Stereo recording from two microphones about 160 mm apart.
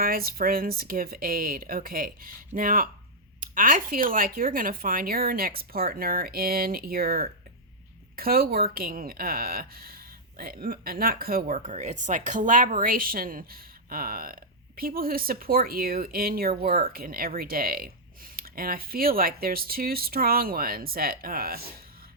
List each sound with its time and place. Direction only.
0.0 s speech: 65° right (ahead or behind)